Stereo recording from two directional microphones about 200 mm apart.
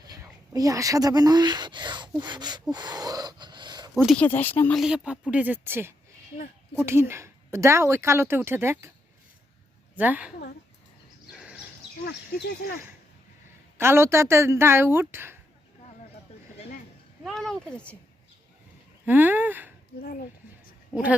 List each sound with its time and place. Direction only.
0.0 s speech: 20° right (ahead or behind)
2.7 s a sound: 20° right (ahead or behind)
4.0 s speech: 5° left (ahead or behind)
4.8 s a woman's voice: 5° right (ahead or behind)
9.9 s a woman's voice: 10° right (ahead or behind)
11.3 s a sound: 5° right (ahead or behind)
12.0 s speech: 55° left (ahead or behind)
13.7 s a woman's voice: 10° right (ahead or behind)
17.2 s speech: 5° left (ahead or behind)
19.0 s a woman's voice: 10° right (ahead or behind)
20.0 s speech: 50° left (ahead or behind)
20.9 s a woman's voice: 5° right (ahead or behind)